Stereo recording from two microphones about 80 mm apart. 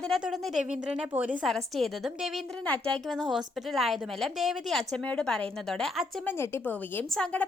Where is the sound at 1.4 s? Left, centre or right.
Centre.